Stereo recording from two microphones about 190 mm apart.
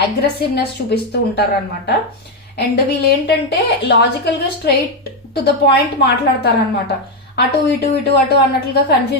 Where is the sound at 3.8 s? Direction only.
60° left (ahead or behind).